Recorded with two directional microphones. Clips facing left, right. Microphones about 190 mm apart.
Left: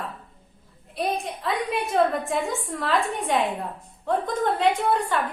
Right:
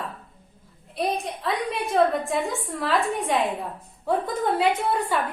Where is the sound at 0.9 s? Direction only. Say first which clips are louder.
Right 1 dB; centre (ahead or behind).